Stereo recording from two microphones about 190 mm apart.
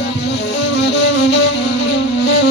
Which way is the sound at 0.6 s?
65° left (ahead or behind).